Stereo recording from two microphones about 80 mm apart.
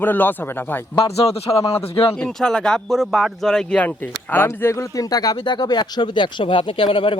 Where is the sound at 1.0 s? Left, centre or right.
Left.